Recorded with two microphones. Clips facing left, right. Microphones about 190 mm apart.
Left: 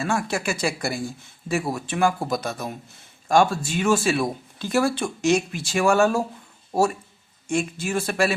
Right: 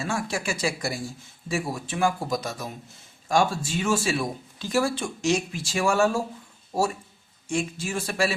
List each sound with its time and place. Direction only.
0.0 s speech: 60° left (ahead or behind)
7.4 s speech: 60° left (ahead or behind)